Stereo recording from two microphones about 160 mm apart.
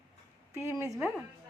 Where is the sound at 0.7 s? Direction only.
15° right (ahead or behind).